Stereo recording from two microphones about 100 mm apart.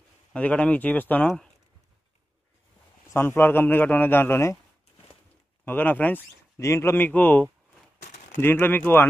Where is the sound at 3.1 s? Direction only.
20° left (ahead or behind).